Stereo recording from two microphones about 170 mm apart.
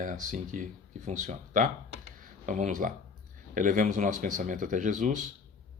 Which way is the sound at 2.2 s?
50° right (ahead or behind).